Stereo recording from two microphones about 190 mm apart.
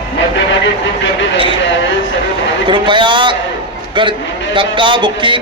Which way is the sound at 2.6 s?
25° right (ahead or behind).